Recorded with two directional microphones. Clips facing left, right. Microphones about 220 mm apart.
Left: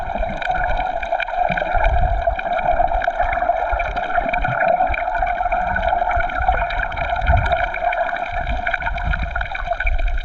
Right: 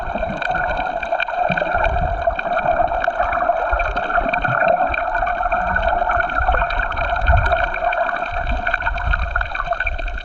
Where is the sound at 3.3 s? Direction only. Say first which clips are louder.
Right 1 dB; 10° left (ahead or behind).